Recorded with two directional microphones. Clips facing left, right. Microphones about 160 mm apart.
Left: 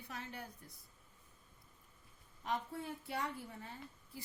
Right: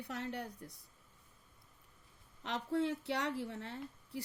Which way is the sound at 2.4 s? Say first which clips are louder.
Right 6 dB; 75° right (ahead or behind).